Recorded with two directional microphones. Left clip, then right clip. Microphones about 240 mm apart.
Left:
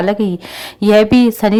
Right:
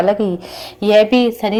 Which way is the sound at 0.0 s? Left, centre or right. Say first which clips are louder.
Right 1 dB; left.